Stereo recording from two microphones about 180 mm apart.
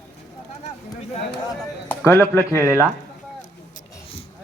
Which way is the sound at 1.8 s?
15° left (ahead or behind).